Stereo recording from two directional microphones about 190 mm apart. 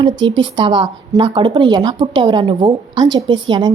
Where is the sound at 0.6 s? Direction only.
25° right (ahead or behind).